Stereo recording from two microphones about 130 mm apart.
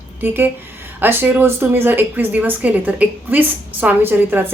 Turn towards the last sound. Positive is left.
turn(degrees=-15)  # may be behind; listen again after turning